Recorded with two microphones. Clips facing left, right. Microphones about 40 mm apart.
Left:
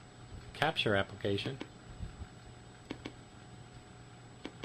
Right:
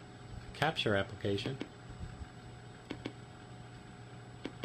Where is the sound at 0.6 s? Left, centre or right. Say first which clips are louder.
Left 1 dB; centre.